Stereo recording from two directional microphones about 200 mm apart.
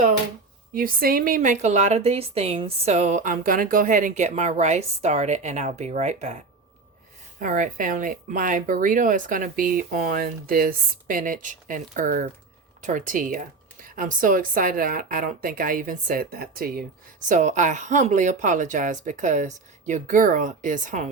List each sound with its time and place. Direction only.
0.7 s speech: 45° right (ahead or behind)